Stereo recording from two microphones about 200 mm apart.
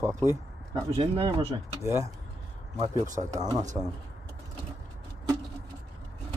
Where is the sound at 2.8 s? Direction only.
35° right (ahead or behind).